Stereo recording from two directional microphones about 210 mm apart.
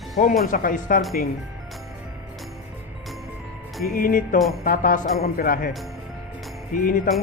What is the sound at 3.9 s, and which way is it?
Speech, 40° left (ahead or behind).